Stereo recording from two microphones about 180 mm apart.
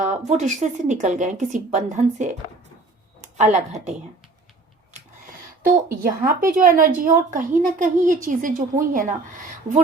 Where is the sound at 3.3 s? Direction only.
40° right (ahead or behind).